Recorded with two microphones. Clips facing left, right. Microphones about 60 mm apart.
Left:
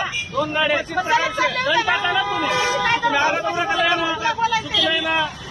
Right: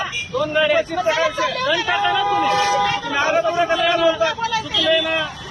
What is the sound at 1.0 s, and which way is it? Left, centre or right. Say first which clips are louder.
Speech: right 1 dB; centre.